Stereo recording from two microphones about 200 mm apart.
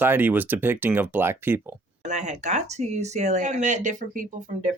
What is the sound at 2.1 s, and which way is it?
Speech, 35° right (ahead or behind).